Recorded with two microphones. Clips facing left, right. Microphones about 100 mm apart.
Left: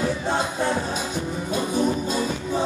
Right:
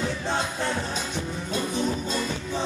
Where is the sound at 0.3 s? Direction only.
10° left (ahead or behind).